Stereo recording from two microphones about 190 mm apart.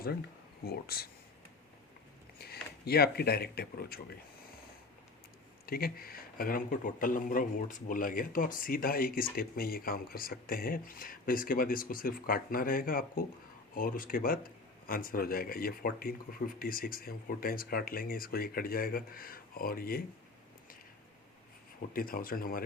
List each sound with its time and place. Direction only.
0.6 s a man's voice: 55° left (ahead or behind)
2.4 s speech: 55° left (ahead or behind)
5.6 s a man's voice: 50° left (ahead or behind)
21.9 s a man's voice: 50° left (ahead or behind)